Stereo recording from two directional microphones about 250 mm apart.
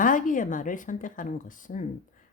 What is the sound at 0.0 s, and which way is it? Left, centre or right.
Speech, left.